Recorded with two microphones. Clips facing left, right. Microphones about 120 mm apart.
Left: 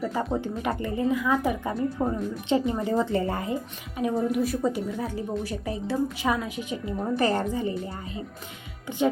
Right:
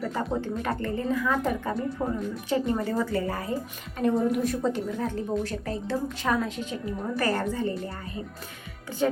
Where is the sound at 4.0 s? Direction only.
5° left (ahead or behind).